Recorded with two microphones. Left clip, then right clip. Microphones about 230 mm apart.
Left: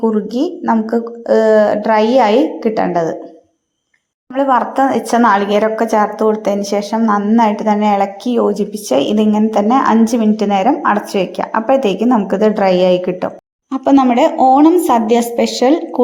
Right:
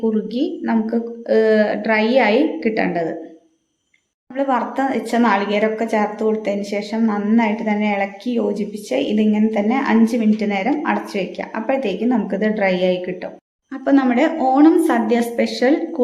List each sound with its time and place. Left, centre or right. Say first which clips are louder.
0.0 s a woman's voice: left 5 dB; centre
0.6 s a woman's voice: left 6 dB; centre
1.4 s a woman's voice: left 5 dB; centre
4.4 s a woman's voice: left 7 dB; left